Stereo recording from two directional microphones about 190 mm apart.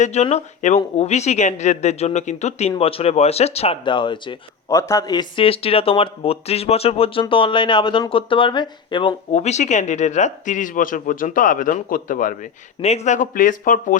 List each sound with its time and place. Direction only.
0.0 s speech: 35° left (ahead or behind)